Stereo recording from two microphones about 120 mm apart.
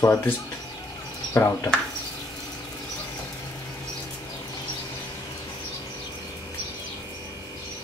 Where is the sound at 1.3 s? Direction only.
20° left (ahead or behind).